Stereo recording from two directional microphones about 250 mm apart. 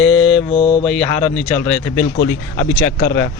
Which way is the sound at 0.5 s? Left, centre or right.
Centre.